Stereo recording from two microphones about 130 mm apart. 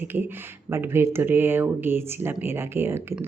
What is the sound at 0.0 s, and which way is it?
Speech, 15° right (ahead or behind).